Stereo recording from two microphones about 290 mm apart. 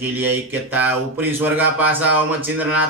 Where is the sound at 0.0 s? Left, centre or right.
Centre.